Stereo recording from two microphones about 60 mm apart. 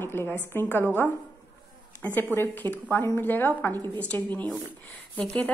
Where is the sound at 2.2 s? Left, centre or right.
Left.